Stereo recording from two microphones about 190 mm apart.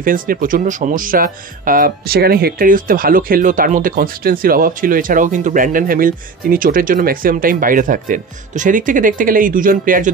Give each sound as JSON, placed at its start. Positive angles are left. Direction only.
{"t": 0.0, "sound": "speech", "side_deg": -45}